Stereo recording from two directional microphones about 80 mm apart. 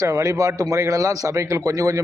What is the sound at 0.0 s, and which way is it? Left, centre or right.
A man's voice, right.